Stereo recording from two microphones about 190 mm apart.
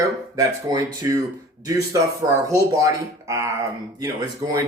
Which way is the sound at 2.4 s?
15° right (ahead or behind).